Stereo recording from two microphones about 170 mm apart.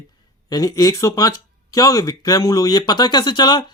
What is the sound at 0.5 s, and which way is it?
Speech, 20° left (ahead or behind).